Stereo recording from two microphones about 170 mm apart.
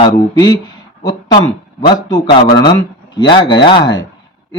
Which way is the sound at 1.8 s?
25° left (ahead or behind).